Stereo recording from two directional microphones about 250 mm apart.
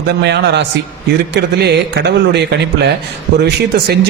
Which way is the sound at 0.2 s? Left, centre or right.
Right.